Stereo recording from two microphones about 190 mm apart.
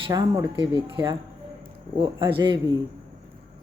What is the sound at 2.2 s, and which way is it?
Speech, 25° right (ahead or behind).